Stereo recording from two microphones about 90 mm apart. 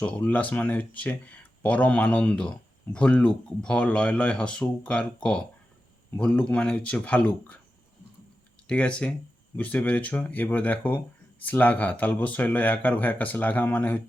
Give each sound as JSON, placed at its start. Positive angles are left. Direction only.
{"t": 0.0, "sound": "speech", "side_deg": 15}
{"t": 8.6, "sound": "speech", "side_deg": 10}